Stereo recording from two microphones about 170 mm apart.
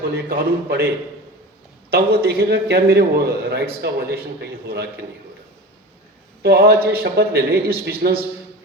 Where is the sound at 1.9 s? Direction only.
65° right (ahead or behind).